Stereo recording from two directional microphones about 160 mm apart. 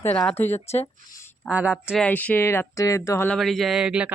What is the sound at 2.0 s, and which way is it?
Speech, 10° left (ahead or behind).